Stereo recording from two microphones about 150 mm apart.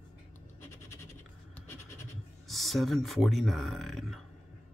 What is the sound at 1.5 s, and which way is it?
Scratch, 15° left (ahead or behind).